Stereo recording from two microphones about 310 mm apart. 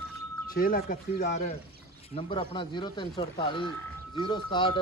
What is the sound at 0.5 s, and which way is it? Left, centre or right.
Speech, left.